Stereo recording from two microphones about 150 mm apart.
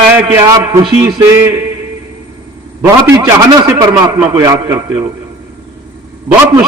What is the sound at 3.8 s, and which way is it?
A man's voice, 25° right (ahead or behind).